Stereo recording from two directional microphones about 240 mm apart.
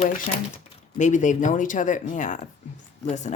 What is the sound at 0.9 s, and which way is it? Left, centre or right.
A woman's voice, left.